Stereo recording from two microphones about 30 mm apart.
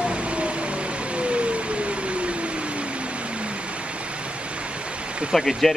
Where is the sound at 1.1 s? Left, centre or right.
Right.